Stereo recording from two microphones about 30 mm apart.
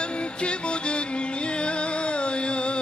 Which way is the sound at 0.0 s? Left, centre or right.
Left.